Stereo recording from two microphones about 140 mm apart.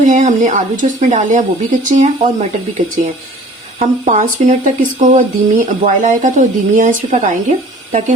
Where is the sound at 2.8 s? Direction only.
65° right (ahead or behind).